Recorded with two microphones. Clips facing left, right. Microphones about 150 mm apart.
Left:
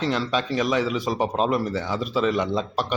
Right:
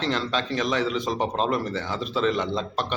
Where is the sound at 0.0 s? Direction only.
5° left (ahead or behind).